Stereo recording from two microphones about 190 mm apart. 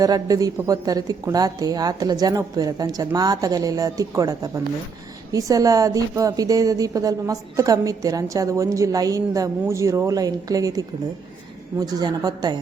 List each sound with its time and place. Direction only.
0.0 s a woman's voice: 20° right (ahead or behind)